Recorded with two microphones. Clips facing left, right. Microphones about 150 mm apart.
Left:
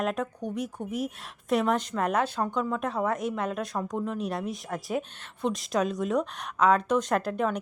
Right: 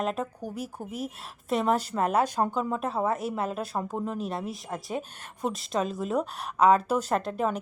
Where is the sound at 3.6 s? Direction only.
30° right (ahead or behind).